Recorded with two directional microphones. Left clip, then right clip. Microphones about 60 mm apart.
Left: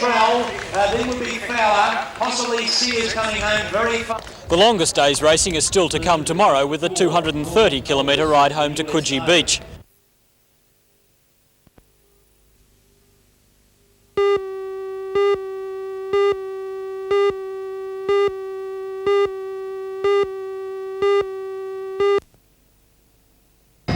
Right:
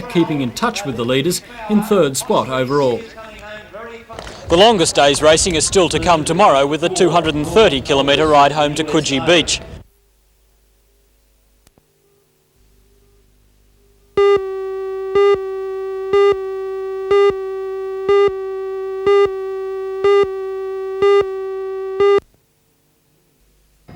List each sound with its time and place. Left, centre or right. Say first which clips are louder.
0.0 s speech: left 3 dB; left
4.2 s speech: right 6 dB; left
14.2 s busy signal: right 5 dB; centre